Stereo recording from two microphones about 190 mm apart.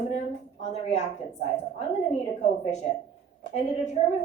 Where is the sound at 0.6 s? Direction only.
35° left (ahead or behind).